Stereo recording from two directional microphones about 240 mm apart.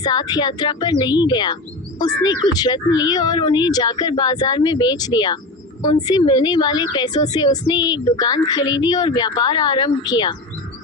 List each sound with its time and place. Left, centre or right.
0.0 s a woman's voice: centre